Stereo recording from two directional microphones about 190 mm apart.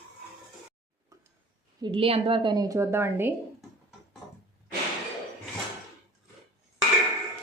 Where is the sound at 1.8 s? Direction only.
25° right (ahead or behind); by 3.3 s 10° right (ahead or behind).